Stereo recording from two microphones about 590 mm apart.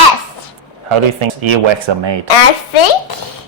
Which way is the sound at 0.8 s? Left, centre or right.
Right.